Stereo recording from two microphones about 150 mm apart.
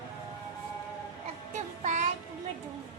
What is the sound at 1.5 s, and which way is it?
Child singing, 55° right (ahead or behind).